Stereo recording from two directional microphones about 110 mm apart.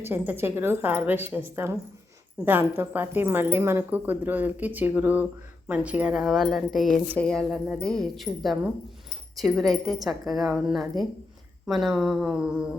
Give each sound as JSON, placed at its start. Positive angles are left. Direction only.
{"t": 0.0, "sound": "a woman's voice", "side_deg": -20}